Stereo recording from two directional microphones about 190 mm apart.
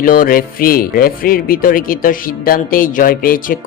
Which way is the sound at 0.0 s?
50° left (ahead or behind).